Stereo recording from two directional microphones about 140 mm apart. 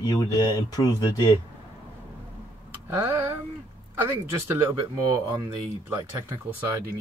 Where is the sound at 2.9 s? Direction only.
15° right (ahead or behind).